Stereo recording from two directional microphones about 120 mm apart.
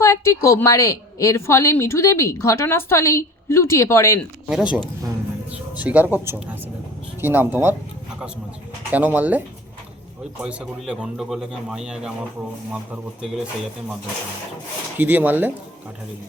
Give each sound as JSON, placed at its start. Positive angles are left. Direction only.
{"t": 0.0, "sound": "a woman's voice", "side_deg": 25}
{"t": 4.4, "sound": "speech", "side_deg": -10}
{"t": 8.9, "sound": "speech", "side_deg": -15}
{"t": 10.4, "sound": "speech", "side_deg": -10}
{"t": 14.9, "sound": "speech", "side_deg": -15}